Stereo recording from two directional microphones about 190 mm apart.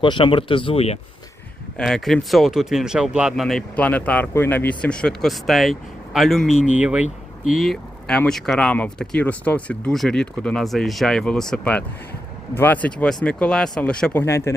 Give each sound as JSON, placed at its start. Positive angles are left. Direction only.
{"t": 0.0, "sound": "speech", "side_deg": 25}
{"t": 1.8, "sound": "speech", "side_deg": 0}